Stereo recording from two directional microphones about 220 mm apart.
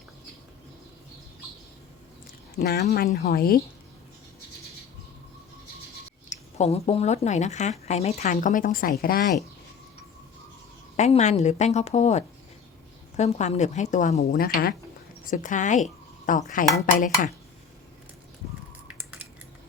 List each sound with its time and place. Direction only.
2.6 s speech: 45° left (ahead or behind)
6.3 s speech: 30° left (ahead or behind)
10.9 s speech: 30° left (ahead or behind)